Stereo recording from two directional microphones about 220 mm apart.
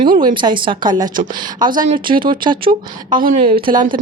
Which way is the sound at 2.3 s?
20° right (ahead or behind).